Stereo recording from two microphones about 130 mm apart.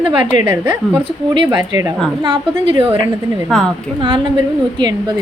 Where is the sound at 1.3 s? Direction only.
40° right (ahead or behind).